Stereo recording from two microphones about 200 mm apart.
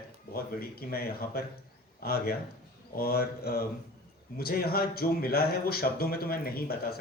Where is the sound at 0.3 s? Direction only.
50° left (ahead or behind).